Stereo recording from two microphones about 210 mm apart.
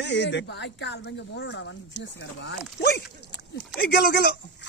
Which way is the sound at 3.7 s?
45° left (ahead or behind).